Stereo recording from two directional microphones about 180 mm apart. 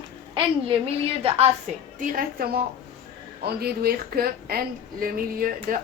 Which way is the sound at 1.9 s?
50° right (ahead or behind).